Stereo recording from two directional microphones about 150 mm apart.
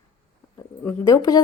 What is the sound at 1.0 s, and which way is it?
Speech, 25° left (ahead or behind).